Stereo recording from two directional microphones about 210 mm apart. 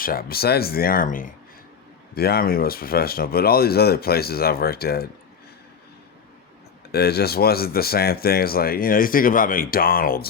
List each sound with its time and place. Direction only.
0.0 s speech: 45° left (ahead or behind)
6.9 s speech: 50° left (ahead or behind)